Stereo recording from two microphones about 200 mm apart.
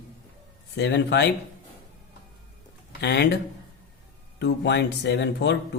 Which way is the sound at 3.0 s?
55° left (ahead or behind).